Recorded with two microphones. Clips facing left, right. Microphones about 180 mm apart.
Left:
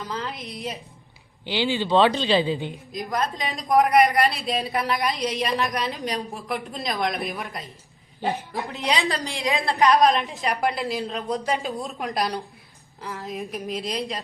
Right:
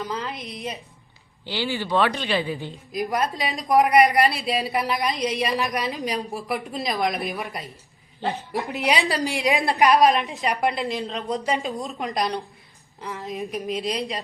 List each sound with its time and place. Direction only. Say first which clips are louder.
0.0 s a woman's voice: right 2 dB; centre (ahead or behind)
1.5 s a man's voice: left 3 dB; 20° left (ahead or behind)
3.3 s a woman's voice: even; centre (ahead or behind)
8.2 s a man's voice: left 1 dB; 15° left (ahead or behind)
8.5 s a woman's voice: right 2 dB; 15° right (ahead or behind)
9.9 s a woman's voice: right 1 dB; 5° right (ahead or behind)